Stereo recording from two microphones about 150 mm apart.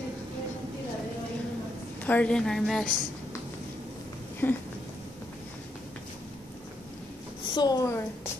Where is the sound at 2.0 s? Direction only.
10° left (ahead or behind).